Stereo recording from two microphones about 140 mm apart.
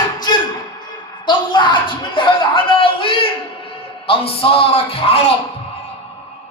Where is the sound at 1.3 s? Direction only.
35° left (ahead or behind).